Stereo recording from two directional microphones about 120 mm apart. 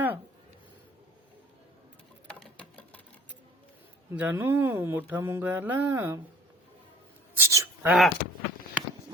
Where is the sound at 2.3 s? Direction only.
10° left (ahead or behind).